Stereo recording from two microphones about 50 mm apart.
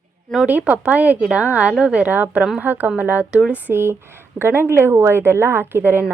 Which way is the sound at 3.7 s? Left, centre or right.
Right.